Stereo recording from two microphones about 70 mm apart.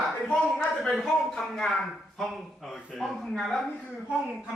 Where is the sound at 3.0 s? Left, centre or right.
Centre.